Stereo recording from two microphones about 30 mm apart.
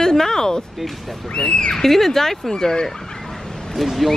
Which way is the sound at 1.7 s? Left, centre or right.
Centre.